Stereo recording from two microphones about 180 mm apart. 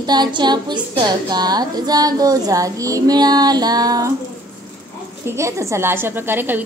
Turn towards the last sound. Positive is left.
turn(degrees=-10)  # may be behind; listen again after turning